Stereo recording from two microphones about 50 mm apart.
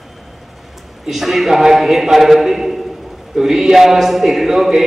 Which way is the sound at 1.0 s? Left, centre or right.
Centre.